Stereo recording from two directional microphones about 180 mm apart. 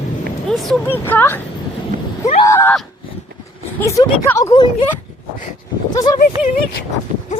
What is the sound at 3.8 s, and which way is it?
Speech, 15° left (ahead or behind).